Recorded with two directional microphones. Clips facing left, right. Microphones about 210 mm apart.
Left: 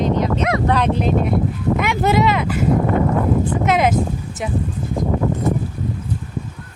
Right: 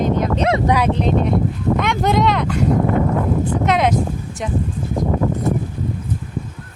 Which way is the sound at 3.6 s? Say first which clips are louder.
Even; 5° left (ahead or behind).